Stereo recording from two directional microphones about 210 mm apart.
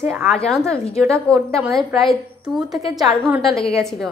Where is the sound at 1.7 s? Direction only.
Centre (ahead or behind).